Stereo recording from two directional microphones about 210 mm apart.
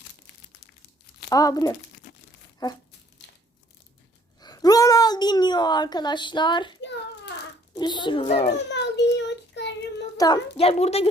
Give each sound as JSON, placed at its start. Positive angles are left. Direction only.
{"t": 1.3, "sound": "speech", "side_deg": 15}
{"t": 4.4, "sound": "a woman's voice", "side_deg": 20}
{"t": 7.8, "sound": "a woman's voice", "side_deg": 20}
{"t": 8.7, "sound": "child singing", "side_deg": 55}
{"t": 10.2, "sound": "a woman's voice", "side_deg": 20}